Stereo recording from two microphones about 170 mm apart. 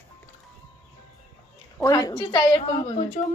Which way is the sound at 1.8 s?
20° left (ahead or behind).